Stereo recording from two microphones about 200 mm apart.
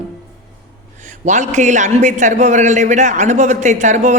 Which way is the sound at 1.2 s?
35° right (ahead or behind).